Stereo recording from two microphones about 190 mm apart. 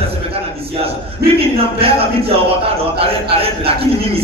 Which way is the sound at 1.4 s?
30° right (ahead or behind).